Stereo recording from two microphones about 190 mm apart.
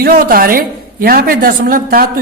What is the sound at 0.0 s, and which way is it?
A woman's voice, 50° right (ahead or behind).